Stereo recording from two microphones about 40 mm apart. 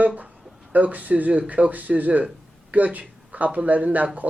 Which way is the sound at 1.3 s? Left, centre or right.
Right.